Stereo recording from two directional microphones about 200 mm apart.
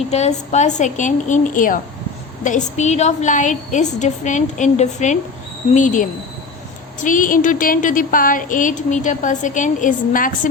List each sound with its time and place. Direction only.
0.1 s a woman's voice: 35° left (ahead or behind)